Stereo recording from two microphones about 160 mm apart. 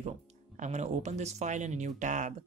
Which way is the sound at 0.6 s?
45° right (ahead or behind).